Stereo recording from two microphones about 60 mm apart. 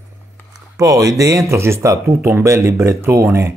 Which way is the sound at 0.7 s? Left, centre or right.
Right.